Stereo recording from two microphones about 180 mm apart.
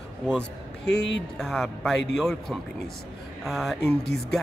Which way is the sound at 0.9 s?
70° left (ahead or behind).